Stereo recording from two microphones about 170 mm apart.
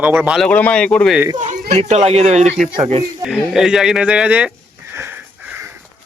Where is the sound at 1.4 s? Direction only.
45° right (ahead or behind).